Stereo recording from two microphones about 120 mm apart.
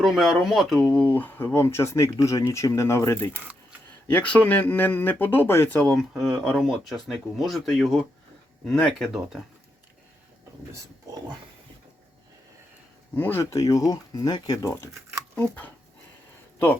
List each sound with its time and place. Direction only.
0.0 s speech: centre (ahead or behind)
0.9 s speech: 15° left (ahead or behind)
3.3 s camera: 10° right (ahead or behind)
4.1 s speech: 10° left (ahead or behind)
10.7 s speech: 30° right (ahead or behind)
13.1 s speech: 15° left (ahead or behind)